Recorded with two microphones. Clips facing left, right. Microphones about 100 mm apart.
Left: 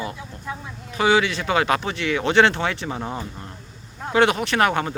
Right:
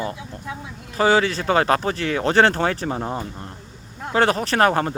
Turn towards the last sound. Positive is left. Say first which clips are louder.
# right 2 dB
turn(degrees=-35)  # may be behind; listen again after turning